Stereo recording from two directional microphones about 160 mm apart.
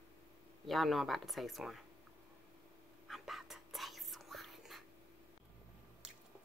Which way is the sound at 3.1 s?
Centre (ahead or behind).